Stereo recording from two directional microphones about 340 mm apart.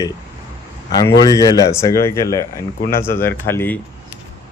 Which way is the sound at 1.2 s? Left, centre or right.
Centre.